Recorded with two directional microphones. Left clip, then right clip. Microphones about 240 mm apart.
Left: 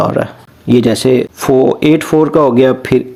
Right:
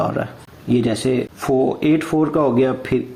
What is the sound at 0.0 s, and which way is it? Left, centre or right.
Speech, left.